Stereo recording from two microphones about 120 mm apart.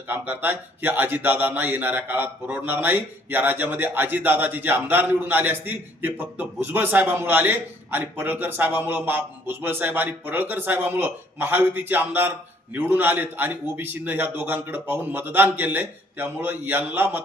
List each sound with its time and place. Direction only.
0.1 s speech: 15° right (ahead or behind)